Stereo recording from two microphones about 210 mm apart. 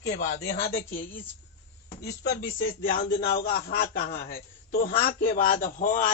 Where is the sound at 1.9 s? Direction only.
50° left (ahead or behind).